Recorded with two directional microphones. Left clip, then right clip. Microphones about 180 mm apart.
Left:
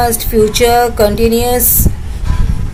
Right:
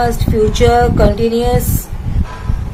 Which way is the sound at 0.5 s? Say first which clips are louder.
Right 1 dB; 35° left (ahead or behind).